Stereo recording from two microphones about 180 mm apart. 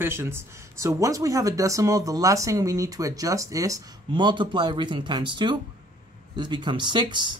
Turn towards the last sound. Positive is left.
turn(degrees=-25)  # may be behind; listen again after turning